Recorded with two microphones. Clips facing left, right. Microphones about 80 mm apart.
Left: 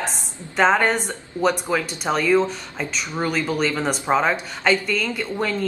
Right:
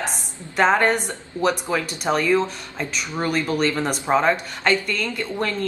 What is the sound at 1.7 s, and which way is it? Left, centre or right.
Speech, centre.